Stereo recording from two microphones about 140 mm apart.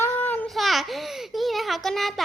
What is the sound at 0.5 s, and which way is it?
A child's voice, centre (ahead or behind).